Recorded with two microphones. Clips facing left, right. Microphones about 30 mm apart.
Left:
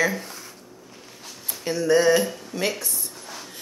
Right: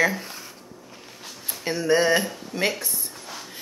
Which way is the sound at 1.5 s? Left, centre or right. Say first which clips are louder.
Left 1 dB; centre.